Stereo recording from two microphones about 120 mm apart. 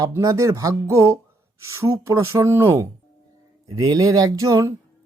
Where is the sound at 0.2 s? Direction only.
25° right (ahead or behind).